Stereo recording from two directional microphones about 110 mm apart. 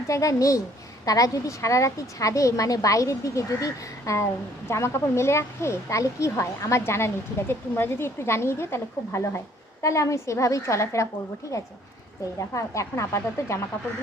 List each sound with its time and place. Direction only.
0.1 s speech: 30° left (ahead or behind)
12.2 s speech: 30° left (ahead or behind)